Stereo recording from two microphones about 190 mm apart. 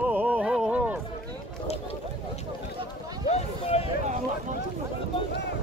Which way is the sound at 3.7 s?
30° left (ahead or behind).